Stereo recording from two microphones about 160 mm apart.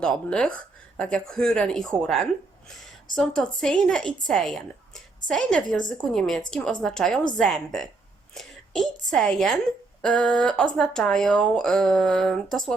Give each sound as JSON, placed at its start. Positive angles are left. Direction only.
{"t": 0.0, "sound": "a woman's voice", "side_deg": 5}